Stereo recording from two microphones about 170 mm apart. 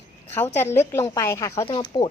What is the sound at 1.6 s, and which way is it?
Speech, 30° left (ahead or behind).